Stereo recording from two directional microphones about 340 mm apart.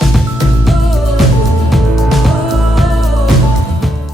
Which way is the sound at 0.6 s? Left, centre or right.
Centre.